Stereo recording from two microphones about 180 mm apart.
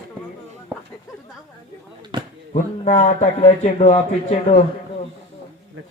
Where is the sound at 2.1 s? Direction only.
25° right (ahead or behind).